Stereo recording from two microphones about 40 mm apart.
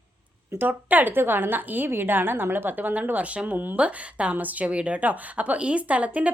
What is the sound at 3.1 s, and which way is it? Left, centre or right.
Speech, right.